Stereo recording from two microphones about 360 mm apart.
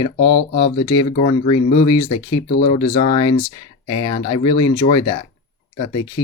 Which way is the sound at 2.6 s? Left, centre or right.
Centre.